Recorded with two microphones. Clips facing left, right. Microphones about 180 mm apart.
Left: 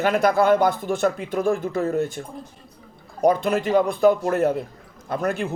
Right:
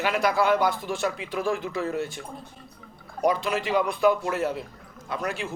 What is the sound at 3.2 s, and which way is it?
A man's voice, 50° left (ahead or behind).